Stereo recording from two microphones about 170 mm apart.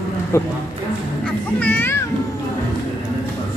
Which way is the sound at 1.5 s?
10° left (ahead or behind).